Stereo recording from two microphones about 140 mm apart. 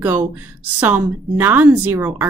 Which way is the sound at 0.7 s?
10° right (ahead or behind).